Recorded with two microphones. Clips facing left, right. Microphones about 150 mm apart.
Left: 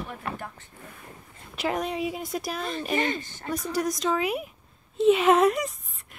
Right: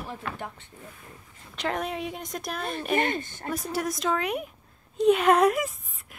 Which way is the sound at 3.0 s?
55° right (ahead or behind).